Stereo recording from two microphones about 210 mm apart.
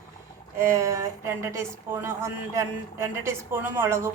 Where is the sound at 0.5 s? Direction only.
15° right (ahead or behind).